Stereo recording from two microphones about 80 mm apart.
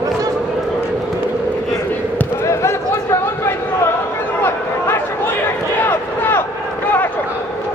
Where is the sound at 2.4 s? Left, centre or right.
Left.